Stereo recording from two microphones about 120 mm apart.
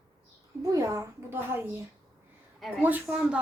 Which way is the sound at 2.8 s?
15° right (ahead or behind).